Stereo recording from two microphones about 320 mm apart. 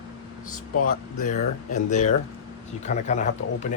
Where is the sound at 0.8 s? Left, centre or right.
Left.